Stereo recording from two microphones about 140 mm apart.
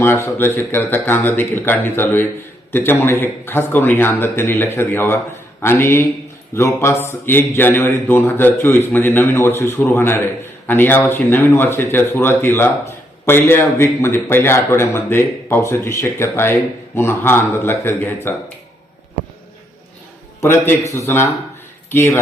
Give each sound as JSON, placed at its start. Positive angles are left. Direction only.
{"t": 0.0, "sound": "speech", "side_deg": 15}
{"t": 20.4, "sound": "a man's voice", "side_deg": 20}